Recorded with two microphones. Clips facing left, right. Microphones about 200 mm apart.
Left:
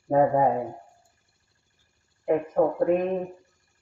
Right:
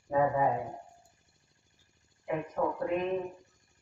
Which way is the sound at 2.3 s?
50° left (ahead or behind).